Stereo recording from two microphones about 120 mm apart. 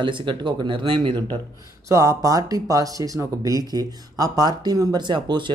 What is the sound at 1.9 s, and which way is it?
Speech, 25° right (ahead or behind).